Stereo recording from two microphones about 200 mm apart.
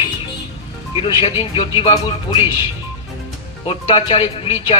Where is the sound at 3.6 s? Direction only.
25° left (ahead or behind).